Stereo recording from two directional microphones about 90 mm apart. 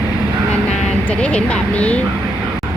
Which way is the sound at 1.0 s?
10° left (ahead or behind).